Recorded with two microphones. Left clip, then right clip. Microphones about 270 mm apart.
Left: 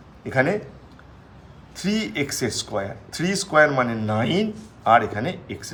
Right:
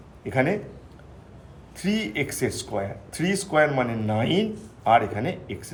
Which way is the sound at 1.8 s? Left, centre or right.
Centre.